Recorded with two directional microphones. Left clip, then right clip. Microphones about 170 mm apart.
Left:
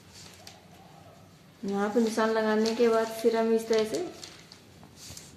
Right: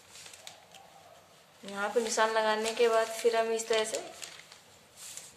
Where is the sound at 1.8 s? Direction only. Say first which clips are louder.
Left 1 dB; 5° left (ahead or behind).